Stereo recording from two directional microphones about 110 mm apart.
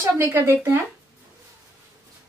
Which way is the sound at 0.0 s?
25° right (ahead or behind).